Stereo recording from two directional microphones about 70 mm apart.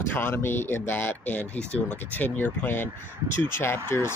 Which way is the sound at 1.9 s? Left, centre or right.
Left.